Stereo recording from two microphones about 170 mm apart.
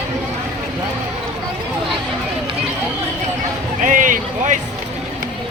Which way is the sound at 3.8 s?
50° right (ahead or behind).